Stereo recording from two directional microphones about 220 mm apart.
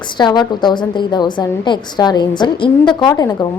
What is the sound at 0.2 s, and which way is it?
A woman's voice, 20° left (ahead or behind).